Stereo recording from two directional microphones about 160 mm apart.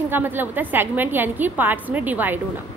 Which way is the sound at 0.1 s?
10° right (ahead or behind).